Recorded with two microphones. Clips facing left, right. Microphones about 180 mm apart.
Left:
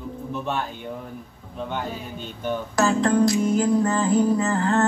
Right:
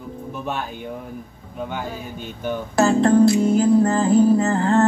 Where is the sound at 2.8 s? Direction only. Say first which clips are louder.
Right 5 dB; 30° right (ahead or behind).